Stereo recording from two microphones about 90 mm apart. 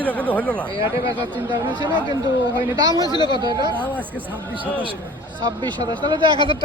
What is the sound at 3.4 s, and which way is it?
Speech, 50° right (ahead or behind).